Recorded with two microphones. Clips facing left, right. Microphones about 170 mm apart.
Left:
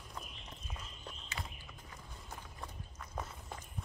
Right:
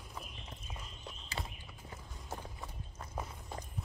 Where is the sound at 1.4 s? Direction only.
35° right (ahead or behind).